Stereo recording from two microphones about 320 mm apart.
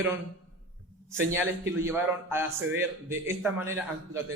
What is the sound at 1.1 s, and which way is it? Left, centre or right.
Speech, centre.